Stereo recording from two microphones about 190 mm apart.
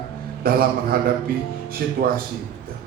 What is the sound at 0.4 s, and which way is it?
Speech, 50° right (ahead or behind).